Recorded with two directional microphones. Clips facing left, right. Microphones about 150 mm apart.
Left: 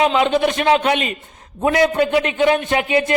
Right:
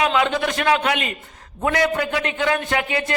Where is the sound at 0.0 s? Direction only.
25° left (ahead or behind).